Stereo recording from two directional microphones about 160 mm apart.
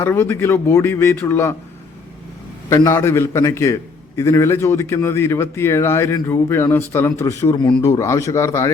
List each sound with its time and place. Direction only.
0.0 s a man's voice: 15° left (ahead or behind)
2.6 s a man's voice: 20° left (ahead or behind)